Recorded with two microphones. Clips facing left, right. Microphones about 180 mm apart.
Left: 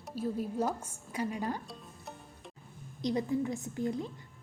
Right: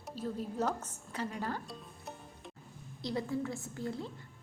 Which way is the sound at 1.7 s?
Centre (ahead or behind).